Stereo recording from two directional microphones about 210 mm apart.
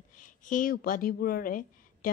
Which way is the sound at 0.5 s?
40° left (ahead or behind).